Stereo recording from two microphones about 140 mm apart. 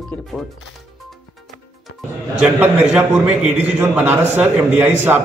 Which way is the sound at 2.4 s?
10° right (ahead or behind).